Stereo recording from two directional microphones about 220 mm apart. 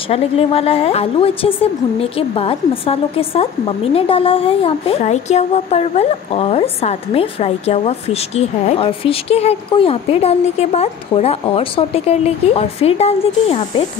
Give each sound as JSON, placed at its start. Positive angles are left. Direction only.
{"t": 0.1, "sound": "a woman's voice", "side_deg": 25}